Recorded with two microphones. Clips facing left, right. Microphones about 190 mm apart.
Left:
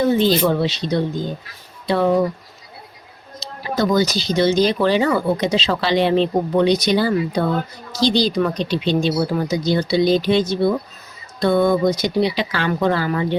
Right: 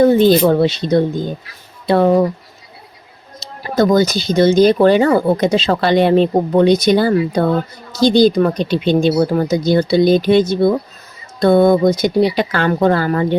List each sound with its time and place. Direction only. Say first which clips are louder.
0.0 s speech: right 6 dB; 50° right (ahead or behind)
3.4 s speech: right 5 dB; 50° right (ahead or behind)